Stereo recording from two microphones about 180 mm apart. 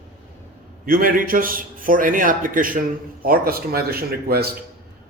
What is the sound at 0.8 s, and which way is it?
A man's voice, 50° right (ahead or behind).